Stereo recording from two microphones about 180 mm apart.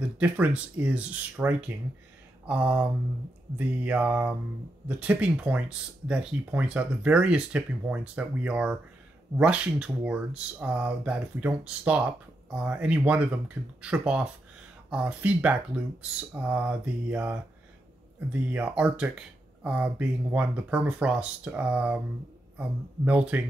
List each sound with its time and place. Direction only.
0.2 s speech: 10° right (ahead or behind)